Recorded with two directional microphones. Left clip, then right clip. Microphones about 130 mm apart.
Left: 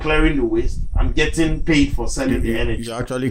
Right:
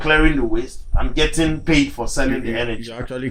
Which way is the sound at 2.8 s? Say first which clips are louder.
Left 4 dB; 50° left (ahead or behind).